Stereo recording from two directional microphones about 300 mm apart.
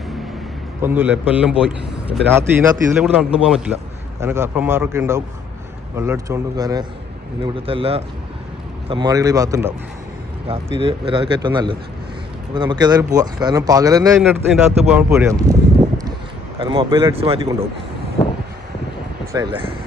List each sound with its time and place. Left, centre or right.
0.8 s a man's voice: centre
10.8 s speech: centre
16.6 s speech: centre
19.3 s speech: centre